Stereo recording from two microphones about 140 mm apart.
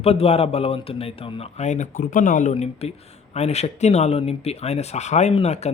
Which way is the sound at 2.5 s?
50° left (ahead or behind).